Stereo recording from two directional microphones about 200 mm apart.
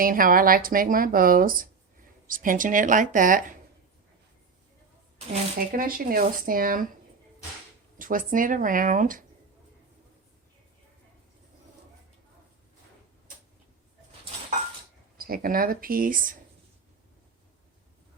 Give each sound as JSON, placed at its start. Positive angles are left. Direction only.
{"t": 0.0, "sound": "speech", "side_deg": -45}
{"t": 5.5, "sound": "speech", "side_deg": -45}
{"t": 7.9, "sound": "speech", "side_deg": -45}
{"t": 15.2, "sound": "speech", "side_deg": -45}